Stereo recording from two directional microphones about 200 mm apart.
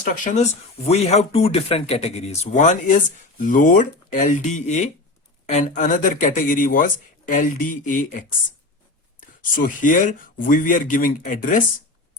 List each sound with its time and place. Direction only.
0.9 s speech: 30° left (ahead or behind)
9.4 s speech: 45° left (ahead or behind)